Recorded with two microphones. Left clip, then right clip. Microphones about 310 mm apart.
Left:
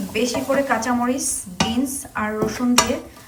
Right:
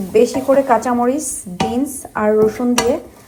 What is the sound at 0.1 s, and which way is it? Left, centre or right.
A woman's voice, centre.